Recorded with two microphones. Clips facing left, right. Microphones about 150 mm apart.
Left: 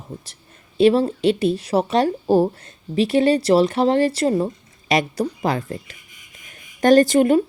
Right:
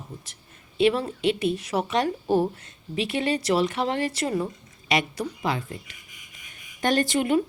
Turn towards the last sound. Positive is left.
turn(degrees=40)  # may be behind; listen again after turning